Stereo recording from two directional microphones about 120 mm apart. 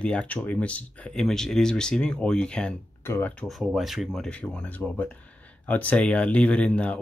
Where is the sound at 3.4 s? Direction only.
Centre (ahead or behind).